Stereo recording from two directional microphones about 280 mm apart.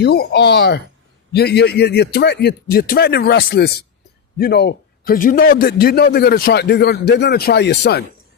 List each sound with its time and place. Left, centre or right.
0.0 s a man's voice: left